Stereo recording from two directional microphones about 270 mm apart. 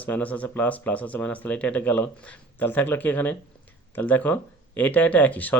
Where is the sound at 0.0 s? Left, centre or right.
Centre.